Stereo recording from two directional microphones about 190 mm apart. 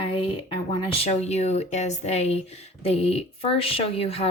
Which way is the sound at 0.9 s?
30° left (ahead or behind).